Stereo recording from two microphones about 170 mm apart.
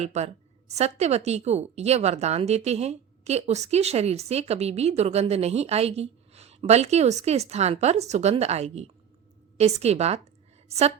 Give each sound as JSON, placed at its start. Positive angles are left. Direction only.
{"t": 0.0, "sound": "a woman's voice", "side_deg": -40}